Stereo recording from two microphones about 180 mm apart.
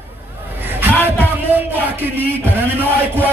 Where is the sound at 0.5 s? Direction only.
10° right (ahead or behind).